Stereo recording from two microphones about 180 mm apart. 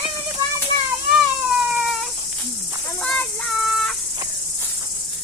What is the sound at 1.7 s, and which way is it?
Cat, 5° right (ahead or behind).